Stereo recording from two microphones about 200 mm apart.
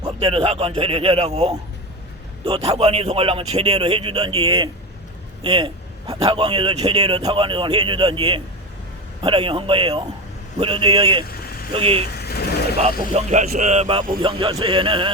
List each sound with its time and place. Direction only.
0.0 s a man's voice: 25° right (ahead or behind)
12.1 s vehicle: 50° left (ahead or behind)
12.7 s a man's voice: 30° right (ahead or behind)